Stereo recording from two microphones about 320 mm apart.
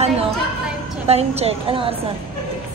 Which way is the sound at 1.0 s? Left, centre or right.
Centre.